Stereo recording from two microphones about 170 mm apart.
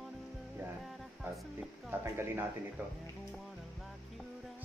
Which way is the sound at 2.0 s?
15° right (ahead or behind).